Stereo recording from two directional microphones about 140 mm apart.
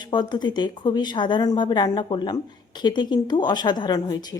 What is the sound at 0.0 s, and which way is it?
Speech, 30° left (ahead or behind).